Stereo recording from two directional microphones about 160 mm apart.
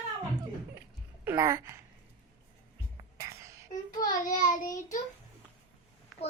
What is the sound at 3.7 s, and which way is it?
Child singing, 25° left (ahead or behind).